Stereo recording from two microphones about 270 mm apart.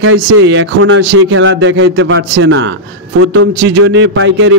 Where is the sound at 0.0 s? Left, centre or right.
Right.